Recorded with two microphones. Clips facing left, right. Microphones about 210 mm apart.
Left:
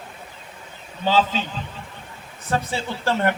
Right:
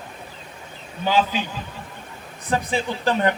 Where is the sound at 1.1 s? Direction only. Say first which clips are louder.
Left 1 dB; 10° right (ahead or behind).